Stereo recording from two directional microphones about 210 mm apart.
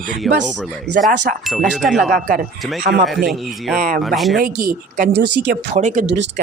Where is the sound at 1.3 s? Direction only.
45° right (ahead or behind).